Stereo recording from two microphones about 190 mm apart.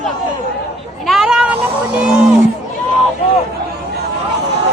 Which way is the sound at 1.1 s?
Centre (ahead or behind).